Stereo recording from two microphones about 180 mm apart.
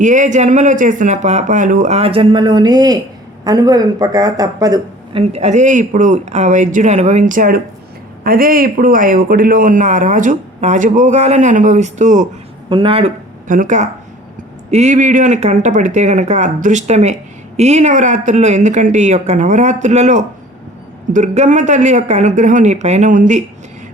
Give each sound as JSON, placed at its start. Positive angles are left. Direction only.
{"t": 0.0, "sound": "speech", "side_deg": -45}
{"t": 5.2, "sound": "a man's voice", "side_deg": -35}
{"t": 12.7, "sound": "speech", "side_deg": -30}
{"t": 13.5, "sound": "a man's voice", "side_deg": -45}